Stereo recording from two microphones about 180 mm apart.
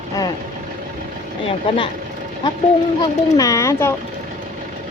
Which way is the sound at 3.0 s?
20° left (ahead or behind).